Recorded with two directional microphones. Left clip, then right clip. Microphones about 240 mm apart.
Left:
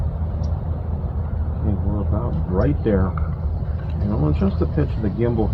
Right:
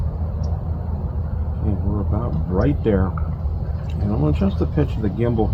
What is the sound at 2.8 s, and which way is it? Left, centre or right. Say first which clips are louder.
Speech: right 1 dB; right.